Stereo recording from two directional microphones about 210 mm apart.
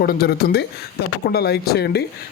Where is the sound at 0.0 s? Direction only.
45° left (ahead or behind).